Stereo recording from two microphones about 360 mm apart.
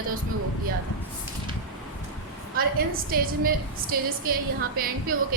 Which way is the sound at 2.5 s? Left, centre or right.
Right.